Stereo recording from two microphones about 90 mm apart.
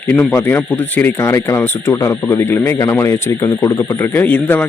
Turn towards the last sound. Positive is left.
turn(degrees=20)  # may be behind; listen again after turning